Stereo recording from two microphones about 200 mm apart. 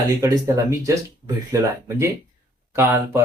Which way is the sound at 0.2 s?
15° right (ahead or behind).